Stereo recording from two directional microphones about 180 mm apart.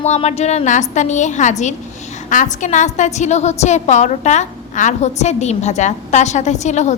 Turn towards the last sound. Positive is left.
turn(degrees=40)  # may be behind; listen again after turning